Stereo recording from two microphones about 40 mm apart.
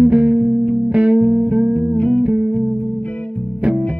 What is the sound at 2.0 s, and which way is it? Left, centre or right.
Music, left.